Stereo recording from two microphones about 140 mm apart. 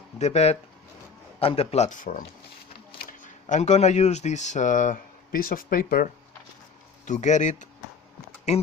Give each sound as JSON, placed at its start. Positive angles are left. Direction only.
{"t": 0.2, "sound": "speech", "side_deg": 50}
{"t": 7.0, "sound": "speech", "side_deg": 60}